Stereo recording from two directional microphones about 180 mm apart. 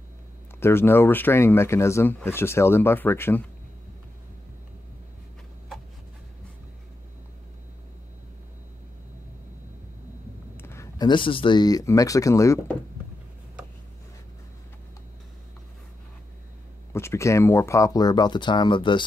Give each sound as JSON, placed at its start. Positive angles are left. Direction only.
{"t": 0.6, "sound": "speech", "side_deg": 15}
{"t": 10.6, "sound": "speech", "side_deg": 15}
{"t": 16.9, "sound": "speech", "side_deg": 15}